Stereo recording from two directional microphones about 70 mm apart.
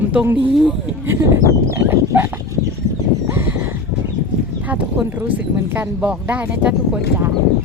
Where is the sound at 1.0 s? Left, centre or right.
Right.